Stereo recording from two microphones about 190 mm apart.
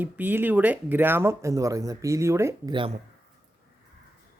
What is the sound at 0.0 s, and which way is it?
Speech, 10° right (ahead or behind).